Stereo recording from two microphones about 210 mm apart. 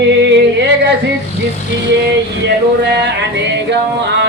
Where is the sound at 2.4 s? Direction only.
55° right (ahead or behind).